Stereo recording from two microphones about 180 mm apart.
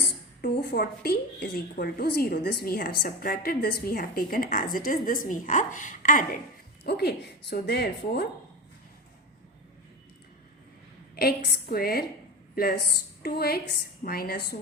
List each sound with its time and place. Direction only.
0.4 s a woman's voice: 60° left (ahead or behind)
6.8 s a woman's voice: 65° left (ahead or behind)
11.2 s a woman's voice: 60° left (ahead or behind)